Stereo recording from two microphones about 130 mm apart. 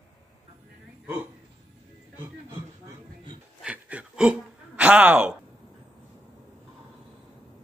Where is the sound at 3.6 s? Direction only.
10° right (ahead or behind).